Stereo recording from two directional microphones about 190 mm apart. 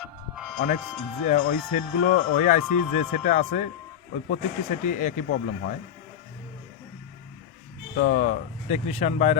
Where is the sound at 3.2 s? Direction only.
40° left (ahead or behind).